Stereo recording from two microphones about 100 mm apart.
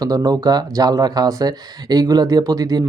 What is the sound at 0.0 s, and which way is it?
Speech, 40° right (ahead or behind).